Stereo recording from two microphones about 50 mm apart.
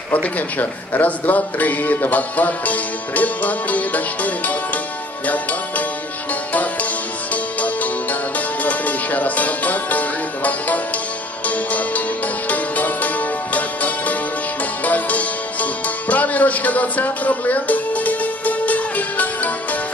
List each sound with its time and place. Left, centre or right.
0.1 s speech: left
5.2 s music: left